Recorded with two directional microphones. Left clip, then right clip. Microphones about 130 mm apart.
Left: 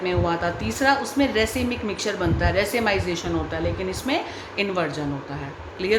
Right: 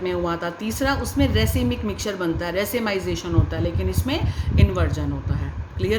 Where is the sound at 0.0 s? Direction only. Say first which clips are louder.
Left 1 dB; 40° right (ahead or behind).